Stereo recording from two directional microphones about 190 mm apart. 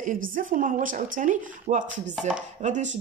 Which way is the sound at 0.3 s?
45° right (ahead or behind).